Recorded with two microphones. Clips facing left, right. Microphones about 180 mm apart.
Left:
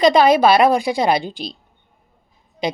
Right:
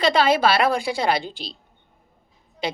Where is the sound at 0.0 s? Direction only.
15° left (ahead or behind).